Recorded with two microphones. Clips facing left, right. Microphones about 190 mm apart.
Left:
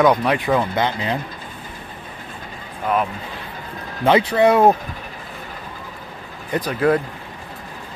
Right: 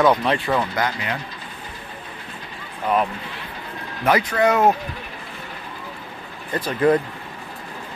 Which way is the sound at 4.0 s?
30° left (ahead or behind).